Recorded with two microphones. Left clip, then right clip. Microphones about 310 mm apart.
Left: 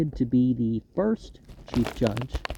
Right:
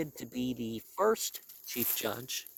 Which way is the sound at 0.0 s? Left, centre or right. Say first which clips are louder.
Left 12 dB; right.